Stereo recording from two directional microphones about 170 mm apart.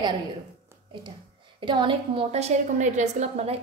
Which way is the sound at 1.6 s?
30° right (ahead or behind).